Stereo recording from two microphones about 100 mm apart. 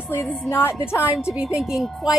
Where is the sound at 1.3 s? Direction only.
5° right (ahead or behind).